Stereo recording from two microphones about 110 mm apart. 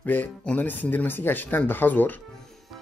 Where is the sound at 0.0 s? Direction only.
15° left (ahead or behind).